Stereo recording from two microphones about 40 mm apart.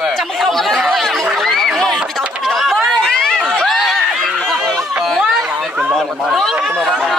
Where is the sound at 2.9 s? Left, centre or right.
Centre.